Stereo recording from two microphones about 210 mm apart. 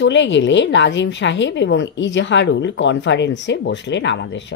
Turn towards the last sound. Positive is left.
turn(degrees=55)  # may be behind; listen again after turning